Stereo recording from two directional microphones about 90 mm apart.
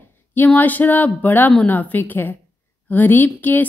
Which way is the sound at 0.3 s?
20° left (ahead or behind).